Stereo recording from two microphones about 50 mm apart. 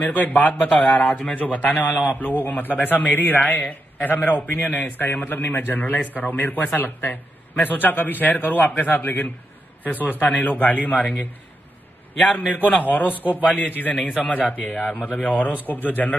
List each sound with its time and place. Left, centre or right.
0.0 s a man's voice: left
12.4 s a man's voice: left
15.6 s a man's voice: left